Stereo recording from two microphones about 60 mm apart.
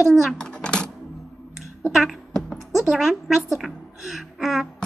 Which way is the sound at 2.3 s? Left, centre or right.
Centre.